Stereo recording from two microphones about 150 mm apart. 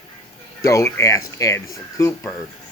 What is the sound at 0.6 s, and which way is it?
Speech, 20° left (ahead or behind).